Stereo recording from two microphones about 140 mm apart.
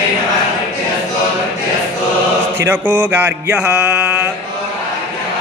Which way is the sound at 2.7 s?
15° right (ahead or behind).